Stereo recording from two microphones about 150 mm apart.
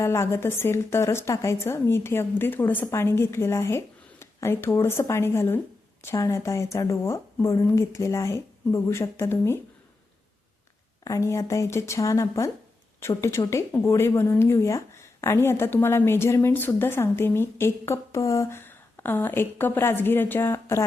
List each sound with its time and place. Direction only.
0.0 s speech: 20° left (ahead or behind)
11.0 s speech: 20° left (ahead or behind)